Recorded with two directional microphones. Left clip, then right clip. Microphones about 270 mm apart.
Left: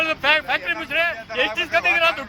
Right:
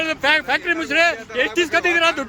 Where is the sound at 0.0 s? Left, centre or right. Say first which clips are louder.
Right 1 dB; centre.